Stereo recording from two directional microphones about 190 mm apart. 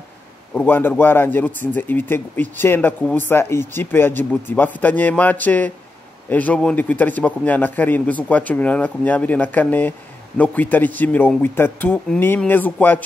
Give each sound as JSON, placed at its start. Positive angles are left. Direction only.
{"t": 0.6, "sound": "a man's voice", "side_deg": 10}